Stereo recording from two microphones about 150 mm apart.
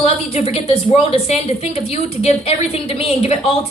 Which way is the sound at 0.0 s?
40° left (ahead or behind).